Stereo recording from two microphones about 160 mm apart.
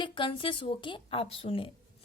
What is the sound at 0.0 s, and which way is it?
A woman's voice, 30° left (ahead or behind).